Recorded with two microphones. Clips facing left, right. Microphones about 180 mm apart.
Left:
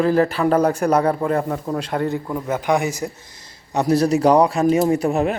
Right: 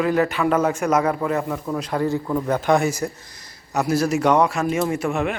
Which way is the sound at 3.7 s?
35° left (ahead or behind).